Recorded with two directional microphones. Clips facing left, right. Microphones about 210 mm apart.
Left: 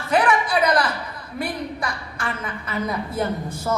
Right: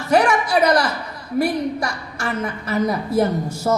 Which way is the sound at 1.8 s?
45° right (ahead or behind).